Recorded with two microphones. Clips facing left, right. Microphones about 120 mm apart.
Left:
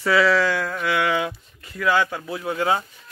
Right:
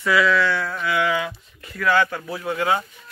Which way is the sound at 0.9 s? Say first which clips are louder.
Even; 65° left (ahead or behind).